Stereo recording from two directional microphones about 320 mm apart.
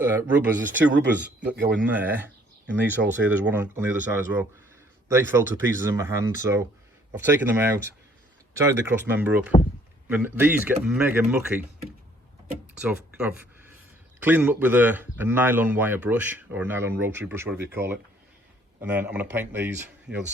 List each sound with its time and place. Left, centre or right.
0.0 s a man's voice: centre
1.5 s speech: right
1.9 s a man's voice: centre
8.9 s a man's voice: centre
12.8 s a man's voice: centre